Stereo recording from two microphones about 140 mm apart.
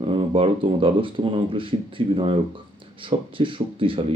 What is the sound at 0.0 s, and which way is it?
A man's voice, 40° right (ahead or behind).